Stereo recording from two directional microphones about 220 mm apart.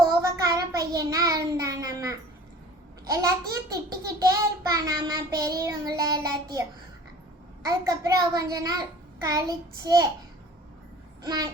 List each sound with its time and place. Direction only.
0.0 s child singing: 15° right (ahead or behind)
11.2 s babbling: 20° right (ahead or behind)